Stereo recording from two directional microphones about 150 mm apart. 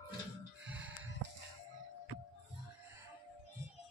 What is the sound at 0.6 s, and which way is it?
Music, 10° right (ahead or behind).